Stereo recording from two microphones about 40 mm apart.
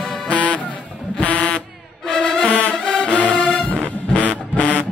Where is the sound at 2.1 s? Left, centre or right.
Left.